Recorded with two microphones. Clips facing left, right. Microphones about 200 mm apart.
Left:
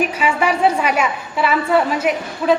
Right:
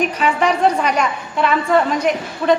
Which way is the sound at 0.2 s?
10° left (ahead or behind).